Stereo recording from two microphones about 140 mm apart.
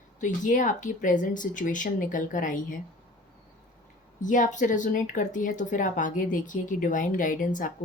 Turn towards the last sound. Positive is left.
turn(degrees=70)  # may be behind; listen again after turning